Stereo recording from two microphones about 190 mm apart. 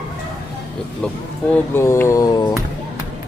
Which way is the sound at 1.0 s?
5° left (ahead or behind).